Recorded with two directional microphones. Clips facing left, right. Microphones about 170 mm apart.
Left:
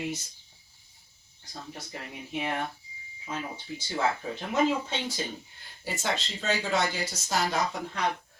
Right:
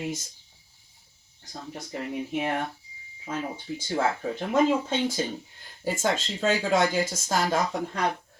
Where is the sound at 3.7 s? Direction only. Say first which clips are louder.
Right 2 dB; 50° right (ahead or behind).